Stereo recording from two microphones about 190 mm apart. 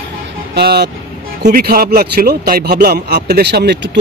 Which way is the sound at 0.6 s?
60° right (ahead or behind).